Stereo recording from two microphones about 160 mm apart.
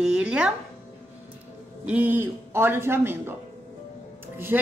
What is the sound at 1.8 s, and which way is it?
A woman's voice, 10° right (ahead or behind).